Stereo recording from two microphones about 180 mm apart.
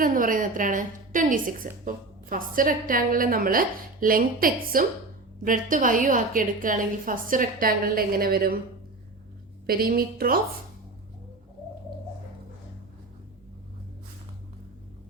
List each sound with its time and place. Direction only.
0.0 s a woman's voice: 50° right (ahead or behind)
9.6 s a woman's voice: 55° right (ahead or behind)